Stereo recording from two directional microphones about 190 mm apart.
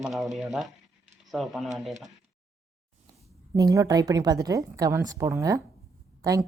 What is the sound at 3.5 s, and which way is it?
A woman's voice, 20° right (ahead or behind).